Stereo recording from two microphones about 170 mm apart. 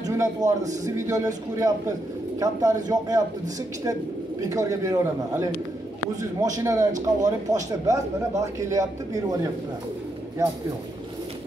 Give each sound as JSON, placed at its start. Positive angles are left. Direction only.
{"t": 0.2, "sound": "a man's voice", "side_deg": -20}
{"t": 4.4, "sound": "a man's voice", "side_deg": -20}